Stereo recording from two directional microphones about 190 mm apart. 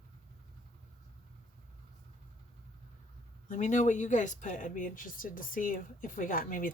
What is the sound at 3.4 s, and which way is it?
Speech, 40° left (ahead or behind).